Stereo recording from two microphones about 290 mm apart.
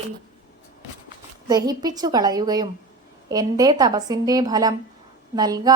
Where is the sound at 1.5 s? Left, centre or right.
Centre.